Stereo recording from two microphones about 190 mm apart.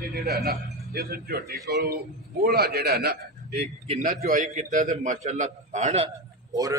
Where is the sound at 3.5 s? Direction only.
35° right (ahead or behind).